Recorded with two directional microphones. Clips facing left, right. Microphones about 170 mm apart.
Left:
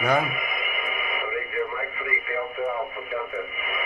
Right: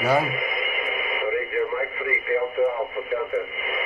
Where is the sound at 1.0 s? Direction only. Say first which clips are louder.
Right 3 dB; 30° right (ahead or behind).